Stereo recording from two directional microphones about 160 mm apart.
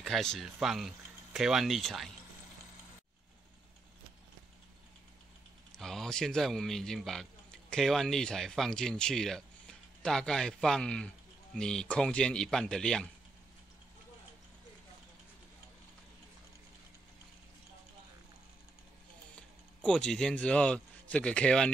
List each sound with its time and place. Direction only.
0.0 s speech: 5° left (ahead or behind)
5.8 s speech: 5° left (ahead or behind)
19.9 s speech: 5° left (ahead or behind)